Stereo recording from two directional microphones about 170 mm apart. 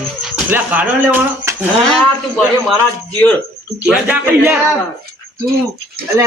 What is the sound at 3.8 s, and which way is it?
Speech, 5° right (ahead or behind).